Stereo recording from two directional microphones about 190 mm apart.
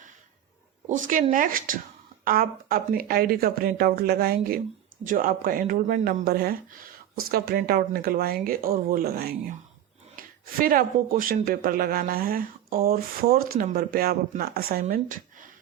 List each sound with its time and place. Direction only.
0.9 s speech: 40° right (ahead or behind)
10.2 s a sound: 50° right (ahead or behind)
11.2 s speech: 50° right (ahead or behind)